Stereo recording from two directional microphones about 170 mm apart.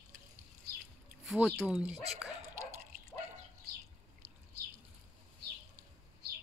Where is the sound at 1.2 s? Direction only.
Centre (ahead or behind).